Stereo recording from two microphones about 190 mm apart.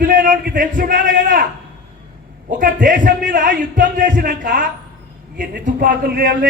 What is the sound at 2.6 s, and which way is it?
Speech, 45° right (ahead or behind).